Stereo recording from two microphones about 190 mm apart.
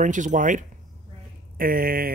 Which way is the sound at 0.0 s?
40° right (ahead or behind).